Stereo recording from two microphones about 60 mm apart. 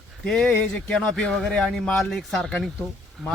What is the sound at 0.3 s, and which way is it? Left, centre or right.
Speech, centre.